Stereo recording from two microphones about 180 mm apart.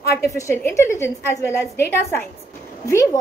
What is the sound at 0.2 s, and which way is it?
A child's voice, 15° left (ahead or behind).